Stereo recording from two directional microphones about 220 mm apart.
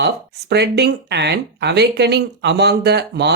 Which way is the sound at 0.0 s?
50° right (ahead or behind).